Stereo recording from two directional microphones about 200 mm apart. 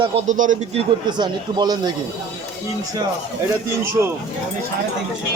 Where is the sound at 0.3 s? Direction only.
40° right (ahead or behind).